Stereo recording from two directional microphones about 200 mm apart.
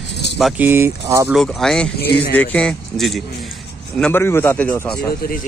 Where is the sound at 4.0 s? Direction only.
10° left (ahead or behind).